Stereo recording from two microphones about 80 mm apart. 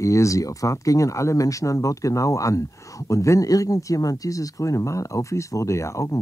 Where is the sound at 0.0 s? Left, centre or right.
Left.